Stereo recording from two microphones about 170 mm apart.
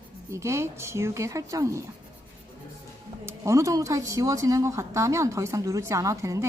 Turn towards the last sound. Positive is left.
turn(degrees=-15)  # may be behind; listen again after turning